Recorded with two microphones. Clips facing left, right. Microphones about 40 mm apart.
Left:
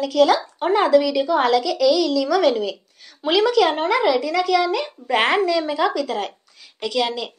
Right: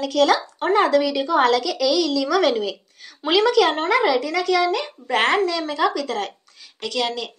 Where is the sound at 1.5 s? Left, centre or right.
Centre.